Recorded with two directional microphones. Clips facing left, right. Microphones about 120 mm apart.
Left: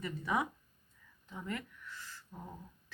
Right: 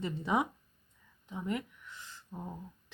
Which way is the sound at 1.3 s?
20° right (ahead or behind).